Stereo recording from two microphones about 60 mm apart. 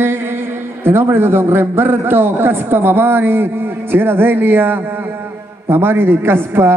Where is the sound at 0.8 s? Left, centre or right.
Right.